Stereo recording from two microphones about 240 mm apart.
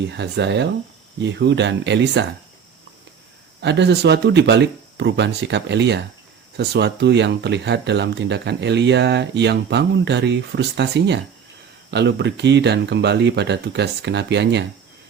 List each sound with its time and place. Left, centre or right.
0.1 s speech: right
3.6 s speech: right